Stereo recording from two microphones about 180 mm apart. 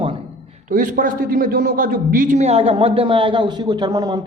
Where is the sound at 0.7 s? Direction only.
50° right (ahead or behind).